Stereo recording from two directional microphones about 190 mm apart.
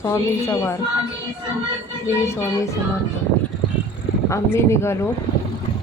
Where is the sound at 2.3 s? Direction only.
15° left (ahead or behind).